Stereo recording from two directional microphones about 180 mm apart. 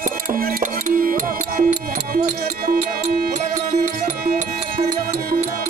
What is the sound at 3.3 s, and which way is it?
Music, 45° right (ahead or behind).